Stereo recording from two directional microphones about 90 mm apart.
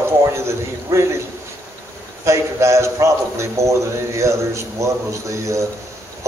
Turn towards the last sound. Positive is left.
turn(degrees=-35)  # may be behind; listen again after turning